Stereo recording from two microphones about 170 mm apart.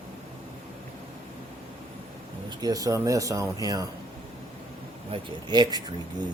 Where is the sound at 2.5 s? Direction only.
20° right (ahead or behind).